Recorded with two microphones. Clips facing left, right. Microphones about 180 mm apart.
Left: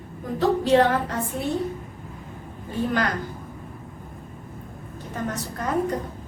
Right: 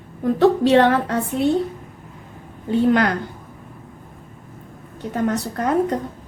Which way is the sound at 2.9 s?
65° right (ahead or behind).